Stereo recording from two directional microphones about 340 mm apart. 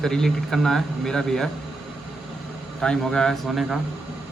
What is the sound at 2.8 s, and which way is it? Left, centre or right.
Speech, centre.